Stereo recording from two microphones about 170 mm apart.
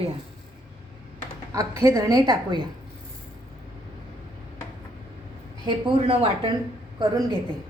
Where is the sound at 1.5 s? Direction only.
20° right (ahead or behind).